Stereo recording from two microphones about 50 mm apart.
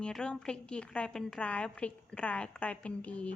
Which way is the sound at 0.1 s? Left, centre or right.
Centre.